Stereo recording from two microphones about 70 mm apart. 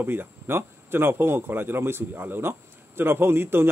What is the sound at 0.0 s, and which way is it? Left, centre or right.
A man's voice, right.